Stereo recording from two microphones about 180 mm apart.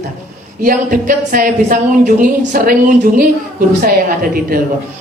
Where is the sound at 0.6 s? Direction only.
50° right (ahead or behind).